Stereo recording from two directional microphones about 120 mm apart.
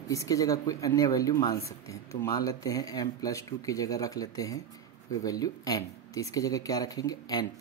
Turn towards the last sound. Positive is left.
turn(degrees=30)  # may be behind; listen again after turning